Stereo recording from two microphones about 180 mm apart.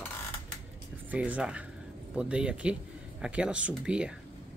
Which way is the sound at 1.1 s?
5° right (ahead or behind).